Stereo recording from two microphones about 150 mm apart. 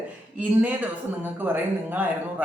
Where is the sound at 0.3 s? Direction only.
10° right (ahead or behind).